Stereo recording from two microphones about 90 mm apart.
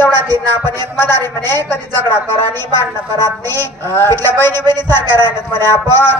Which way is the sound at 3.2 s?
25° left (ahead or behind).